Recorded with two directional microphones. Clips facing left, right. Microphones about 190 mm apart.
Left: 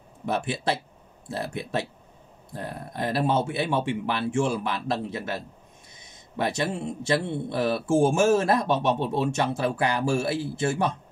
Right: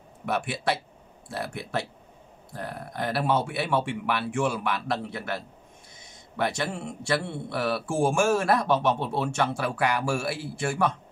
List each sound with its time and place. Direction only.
0.2 s speech: 25° left (ahead or behind)
6.4 s speech: 20° left (ahead or behind)